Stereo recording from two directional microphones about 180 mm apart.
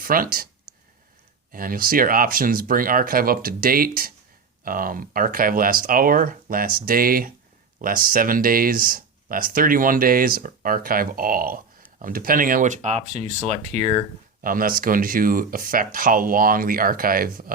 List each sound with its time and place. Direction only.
0.0 s speech: 50° right (ahead or behind)
1.5 s speech: 50° right (ahead or behind)
14.4 s speech: 50° right (ahead or behind)